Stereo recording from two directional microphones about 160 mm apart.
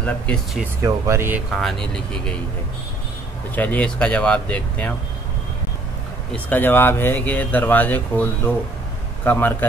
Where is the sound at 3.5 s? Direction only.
10° left (ahead or behind).